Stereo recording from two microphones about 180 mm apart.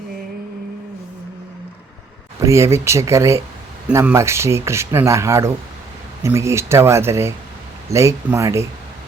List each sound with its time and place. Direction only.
2.4 s speech: 15° right (ahead or behind)